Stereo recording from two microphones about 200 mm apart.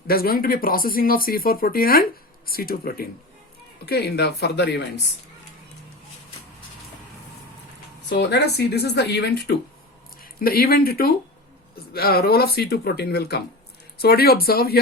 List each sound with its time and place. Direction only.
0.1 s speech: 45° left (ahead or behind)
8.1 s speech: 60° left (ahead or behind)